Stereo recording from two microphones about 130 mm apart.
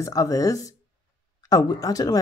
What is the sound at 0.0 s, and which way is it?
Speech, 25° left (ahead or behind).